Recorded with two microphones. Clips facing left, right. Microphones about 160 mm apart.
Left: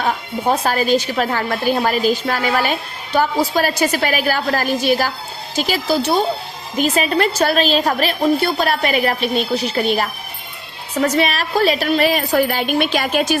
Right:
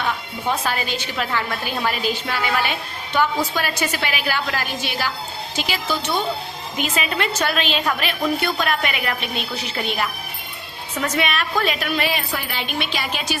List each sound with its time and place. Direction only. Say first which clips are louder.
0.0 s a woman's voice: left 5 dB; 40° left (ahead or behind)